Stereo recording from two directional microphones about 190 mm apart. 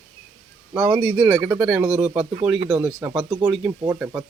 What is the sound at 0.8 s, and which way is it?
Speech, 15° right (ahead or behind).